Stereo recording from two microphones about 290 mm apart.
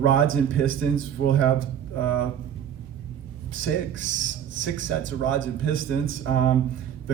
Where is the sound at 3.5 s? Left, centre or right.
Right.